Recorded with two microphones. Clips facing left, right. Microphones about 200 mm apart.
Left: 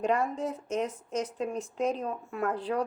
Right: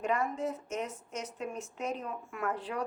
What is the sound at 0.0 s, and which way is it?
Speech, 30° left (ahead or behind).